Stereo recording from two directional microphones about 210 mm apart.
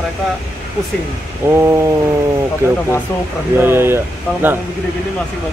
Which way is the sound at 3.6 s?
10° right (ahead or behind).